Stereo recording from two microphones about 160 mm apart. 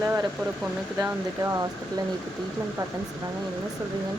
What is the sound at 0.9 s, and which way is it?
Speech, 15° right (ahead or behind).